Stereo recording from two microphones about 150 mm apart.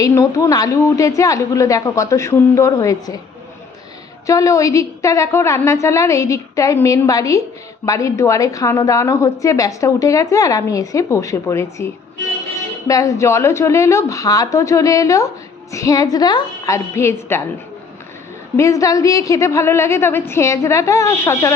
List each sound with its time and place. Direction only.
0.0 s a woman's voice: 20° left (ahead or behind)
4.3 s a woman's voice: 20° left (ahead or behind)
12.9 s a woman's voice: 20° left (ahead or behind)
18.5 s a woman's voice: 20° left (ahead or behind)